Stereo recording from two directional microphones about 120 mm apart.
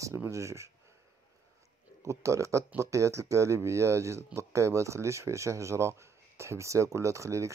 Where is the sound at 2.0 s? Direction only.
25° right (ahead or behind).